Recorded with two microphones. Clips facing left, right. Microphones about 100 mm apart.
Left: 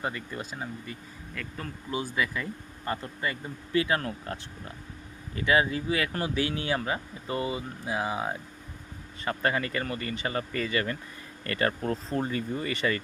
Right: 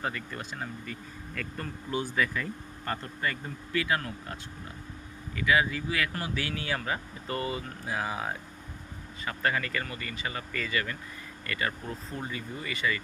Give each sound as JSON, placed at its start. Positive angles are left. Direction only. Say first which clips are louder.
{"t": 0.0, "sound": "speech", "louder": "left 1 dB", "side_deg": 20}
{"t": 1.4, "sound": "speech", "louder": "right 1 dB", "side_deg": 0}
{"t": 2.1, "sound": "speech", "louder": "even", "side_deg": 15}
{"t": 3.7, "sound": "speech", "louder": "left 3 dB", "side_deg": 25}
{"t": 9.2, "sound": "speech", "louder": "left 2 dB", "side_deg": 30}